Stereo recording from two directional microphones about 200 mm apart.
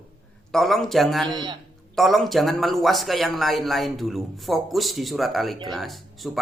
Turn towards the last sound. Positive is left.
turn(degrees=0)  # may be behind; listen again after turning